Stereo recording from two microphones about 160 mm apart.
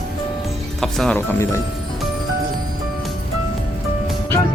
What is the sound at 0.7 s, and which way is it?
Speech, centre (ahead or behind).